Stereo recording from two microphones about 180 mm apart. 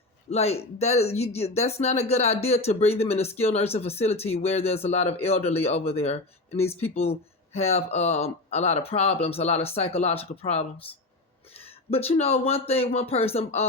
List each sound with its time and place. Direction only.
0.3 s speech: 35° left (ahead or behind)